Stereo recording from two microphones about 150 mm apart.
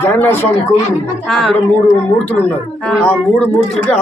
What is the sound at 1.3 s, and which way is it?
Speech, 5° left (ahead or behind).